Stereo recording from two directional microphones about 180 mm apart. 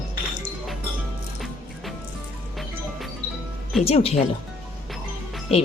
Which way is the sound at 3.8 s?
35° left (ahead or behind).